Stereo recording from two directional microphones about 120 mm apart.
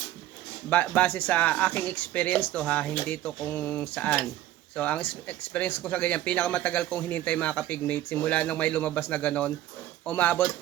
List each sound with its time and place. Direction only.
0.7 s speech: 10° left (ahead or behind)